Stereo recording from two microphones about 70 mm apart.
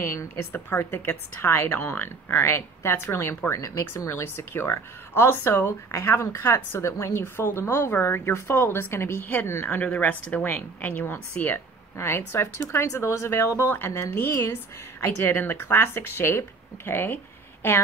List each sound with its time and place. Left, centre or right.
0.0 s a woman's voice: left
0.5 s a woman's voice: left
3.5 s a woman's voice: left
9.8 s a woman's voice: left